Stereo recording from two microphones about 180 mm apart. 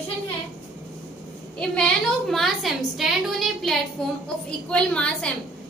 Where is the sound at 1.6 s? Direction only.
5° left (ahead or behind).